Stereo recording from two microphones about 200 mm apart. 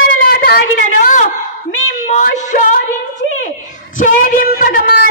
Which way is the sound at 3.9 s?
40° left (ahead or behind).